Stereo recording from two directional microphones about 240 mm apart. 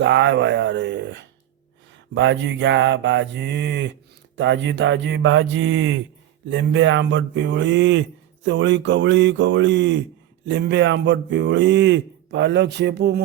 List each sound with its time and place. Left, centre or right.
0.0 s speech: right